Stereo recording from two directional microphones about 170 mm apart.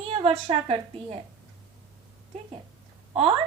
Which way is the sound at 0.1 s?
35° right (ahead or behind).